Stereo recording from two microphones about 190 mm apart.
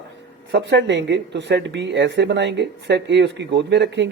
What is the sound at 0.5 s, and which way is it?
Speech, 65° right (ahead or behind).